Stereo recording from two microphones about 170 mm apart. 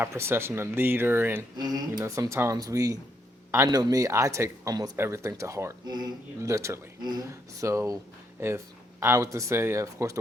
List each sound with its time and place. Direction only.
0.0 s speech: 15° right (ahead or behind)
1.5 s speech: 25° right (ahead or behind)